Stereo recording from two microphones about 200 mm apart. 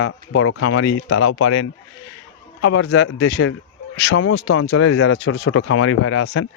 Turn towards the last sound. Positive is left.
turn(degrees=90)